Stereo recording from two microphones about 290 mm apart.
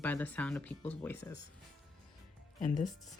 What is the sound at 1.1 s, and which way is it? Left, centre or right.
Speech, left.